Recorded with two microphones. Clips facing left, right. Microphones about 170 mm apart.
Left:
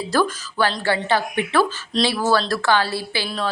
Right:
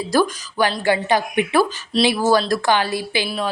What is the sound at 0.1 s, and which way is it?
A woman's voice, 15° right (ahead or behind).